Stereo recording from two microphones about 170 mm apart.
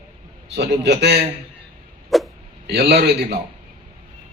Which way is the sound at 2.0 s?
Centre (ahead or behind).